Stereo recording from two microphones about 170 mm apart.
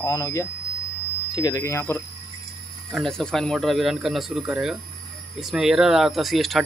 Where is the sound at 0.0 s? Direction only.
20° left (ahead or behind).